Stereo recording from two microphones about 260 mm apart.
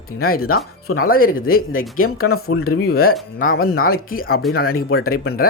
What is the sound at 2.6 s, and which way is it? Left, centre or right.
Speech, left.